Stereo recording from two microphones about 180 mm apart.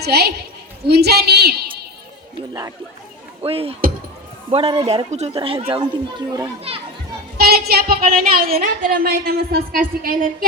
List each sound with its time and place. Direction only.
0.0 s a woman's voice: 65° right (ahead or behind)
2.5 s speech: 20° right (ahead or behind)
3.4 s speech: 30° right (ahead or behind)
7.3 s child singing: 60° right (ahead or behind)
7.7 s a woman's voice: 60° right (ahead or behind)